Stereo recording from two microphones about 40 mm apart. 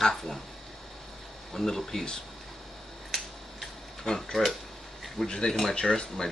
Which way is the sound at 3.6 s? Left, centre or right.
Centre.